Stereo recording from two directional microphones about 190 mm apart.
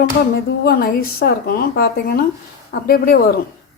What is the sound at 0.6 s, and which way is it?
A woman's voice, 50° left (ahead or behind).